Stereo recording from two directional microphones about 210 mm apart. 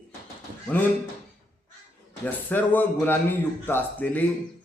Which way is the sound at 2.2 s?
10° left (ahead or behind).